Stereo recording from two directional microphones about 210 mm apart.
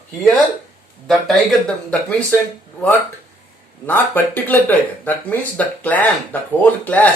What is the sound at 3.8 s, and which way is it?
Speech, 10° left (ahead or behind).